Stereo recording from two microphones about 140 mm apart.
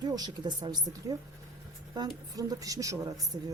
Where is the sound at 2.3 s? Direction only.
25° right (ahead or behind).